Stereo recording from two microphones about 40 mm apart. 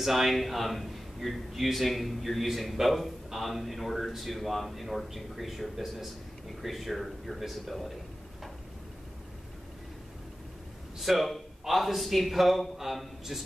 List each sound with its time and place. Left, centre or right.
0.0 s a man's voice: centre
11.0 s a man's voice: centre